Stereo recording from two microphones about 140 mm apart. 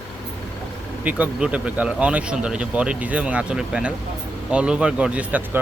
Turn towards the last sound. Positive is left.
turn(degrees=-10)  # may be behind; listen again after turning